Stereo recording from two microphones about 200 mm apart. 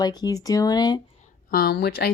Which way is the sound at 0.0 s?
20° left (ahead or behind).